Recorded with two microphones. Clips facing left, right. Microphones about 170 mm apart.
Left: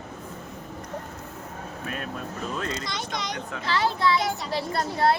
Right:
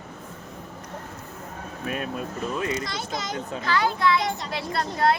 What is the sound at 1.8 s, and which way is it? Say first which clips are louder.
A child's voice: right 5 dB; 10° right (ahead or behind).